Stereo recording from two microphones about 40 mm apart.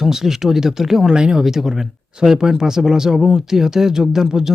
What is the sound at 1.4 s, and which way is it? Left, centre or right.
Speech, centre.